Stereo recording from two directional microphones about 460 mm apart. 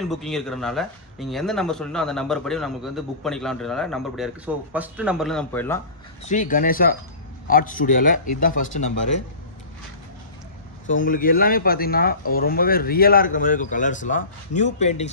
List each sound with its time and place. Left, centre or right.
0.1 s speech: centre
6.2 s a man's voice: centre
10.9 s speech: left